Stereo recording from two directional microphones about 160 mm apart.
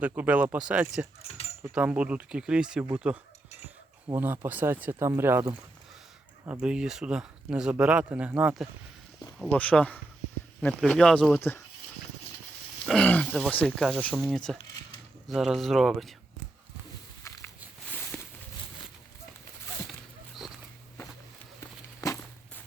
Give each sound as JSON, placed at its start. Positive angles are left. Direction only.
{"t": 0.2, "sound": "speech", "side_deg": -10}
{"t": 1.2, "sound": "speech", "side_deg": 40}
{"t": 1.7, "sound": "speech", "side_deg": -10}
{"t": 9.5, "sound": "speech", "side_deg": 10}
{"t": 11.3, "sound": "speech", "side_deg": 15}
{"t": 12.8, "sound": "speech", "side_deg": 5}
{"t": 17.2, "sound": "a sound", "side_deg": 15}
{"t": 22.0, "sound": "walk", "side_deg": 20}